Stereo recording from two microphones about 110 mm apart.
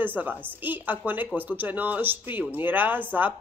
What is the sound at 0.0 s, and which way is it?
Speech, 15° right (ahead or behind).